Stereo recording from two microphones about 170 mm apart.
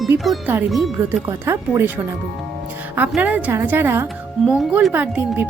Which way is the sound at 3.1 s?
10° right (ahead or behind).